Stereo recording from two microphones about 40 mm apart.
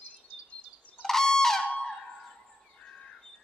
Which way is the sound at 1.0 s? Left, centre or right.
Centre.